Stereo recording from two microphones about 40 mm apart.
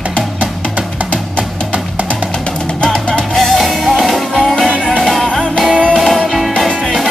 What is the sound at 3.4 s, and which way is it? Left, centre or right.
Music, centre.